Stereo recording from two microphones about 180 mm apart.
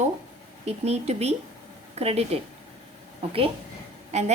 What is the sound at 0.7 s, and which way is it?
A woman's voice, 35° right (ahead or behind).